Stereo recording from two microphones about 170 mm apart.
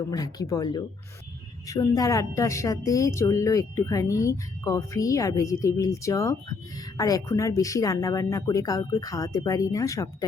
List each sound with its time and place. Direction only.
0.0 s speech: 20° left (ahead or behind)